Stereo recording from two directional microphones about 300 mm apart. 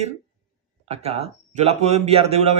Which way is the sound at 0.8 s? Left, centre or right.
Centre.